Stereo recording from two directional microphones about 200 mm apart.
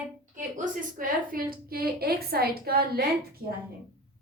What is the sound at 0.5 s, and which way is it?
A woman's voice, 40° right (ahead or behind).